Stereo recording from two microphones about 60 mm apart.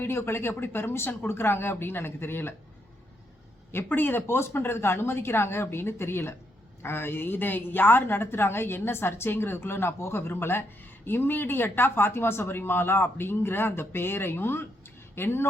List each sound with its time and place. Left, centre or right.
0.0 s a woman's voice: left
3.7 s a woman's voice: left